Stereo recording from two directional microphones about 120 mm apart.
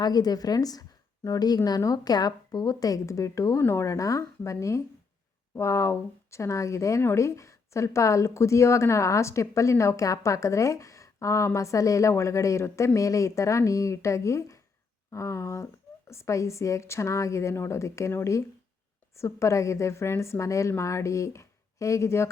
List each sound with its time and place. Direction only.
0.0 s a woman's voice: 35° left (ahead or behind)